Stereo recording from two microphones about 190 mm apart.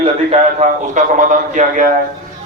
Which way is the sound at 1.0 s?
45° right (ahead or behind).